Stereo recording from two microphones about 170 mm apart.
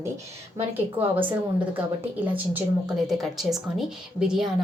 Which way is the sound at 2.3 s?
10° right (ahead or behind).